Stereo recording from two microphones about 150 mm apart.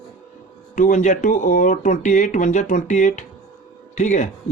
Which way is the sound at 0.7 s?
55° left (ahead or behind).